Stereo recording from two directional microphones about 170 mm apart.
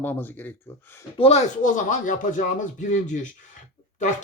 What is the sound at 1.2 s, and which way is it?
A man's voice, 45° left (ahead or behind).